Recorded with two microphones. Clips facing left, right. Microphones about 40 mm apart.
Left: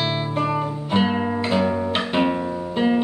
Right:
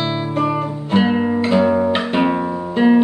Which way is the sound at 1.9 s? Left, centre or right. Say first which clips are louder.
Right 4 dB; centre.